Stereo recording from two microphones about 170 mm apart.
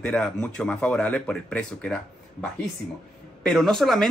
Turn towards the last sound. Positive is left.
turn(degrees=0)  # may be behind; listen again after turning